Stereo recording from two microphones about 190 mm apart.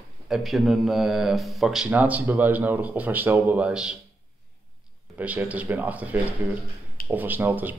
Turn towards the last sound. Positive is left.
turn(degrees=-10)  # may be behind; listen again after turning